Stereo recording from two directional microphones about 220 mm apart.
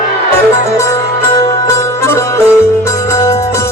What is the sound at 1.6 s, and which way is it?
Music, 15° left (ahead or behind).